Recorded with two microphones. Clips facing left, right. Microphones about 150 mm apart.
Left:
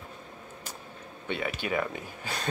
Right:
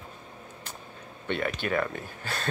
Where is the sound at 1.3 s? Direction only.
10° left (ahead or behind).